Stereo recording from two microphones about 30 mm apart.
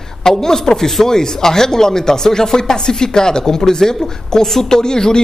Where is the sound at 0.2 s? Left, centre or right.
Centre.